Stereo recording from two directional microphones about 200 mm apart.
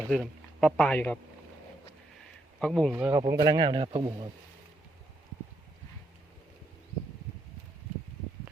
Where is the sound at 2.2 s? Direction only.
5° left (ahead or behind).